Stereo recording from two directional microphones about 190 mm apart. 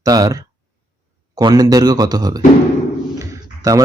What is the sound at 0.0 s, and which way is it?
A man's voice, 20° right (ahead or behind).